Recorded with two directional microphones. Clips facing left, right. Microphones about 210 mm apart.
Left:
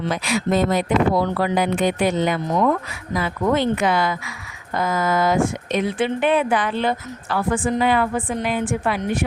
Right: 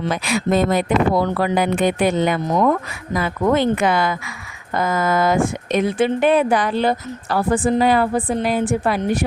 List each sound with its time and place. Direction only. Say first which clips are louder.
0.1 s speech: right 2 dB; 55° right (ahead or behind); by 9.2 s 40° right (ahead or behind)